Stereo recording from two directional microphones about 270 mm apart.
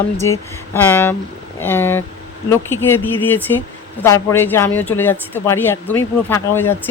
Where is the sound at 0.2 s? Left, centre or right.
Centre.